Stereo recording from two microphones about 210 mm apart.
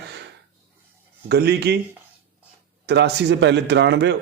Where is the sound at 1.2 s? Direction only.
50° right (ahead or behind).